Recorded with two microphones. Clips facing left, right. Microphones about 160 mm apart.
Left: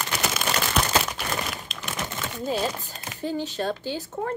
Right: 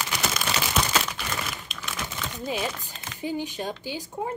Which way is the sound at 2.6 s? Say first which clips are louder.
Left 3 dB; 40° left (ahead or behind).